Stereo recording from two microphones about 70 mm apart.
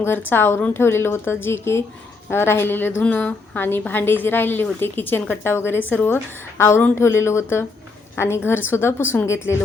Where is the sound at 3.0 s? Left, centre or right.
Centre.